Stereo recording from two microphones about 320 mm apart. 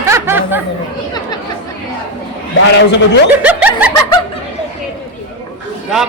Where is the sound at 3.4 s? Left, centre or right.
Centre.